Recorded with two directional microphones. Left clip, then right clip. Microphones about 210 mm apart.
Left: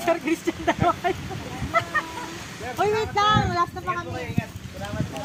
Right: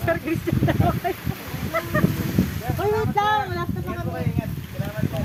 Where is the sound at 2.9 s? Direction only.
40° left (ahead or behind).